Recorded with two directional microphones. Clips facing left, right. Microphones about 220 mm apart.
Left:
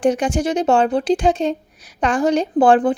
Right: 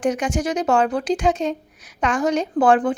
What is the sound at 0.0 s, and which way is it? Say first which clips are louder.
A woman's voice: left 4 dB; 30° left (ahead or behind).